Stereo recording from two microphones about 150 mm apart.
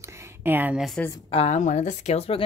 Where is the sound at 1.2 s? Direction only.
40° left (ahead or behind).